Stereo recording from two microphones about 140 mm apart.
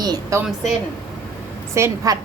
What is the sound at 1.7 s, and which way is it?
Speech, 20° right (ahead or behind).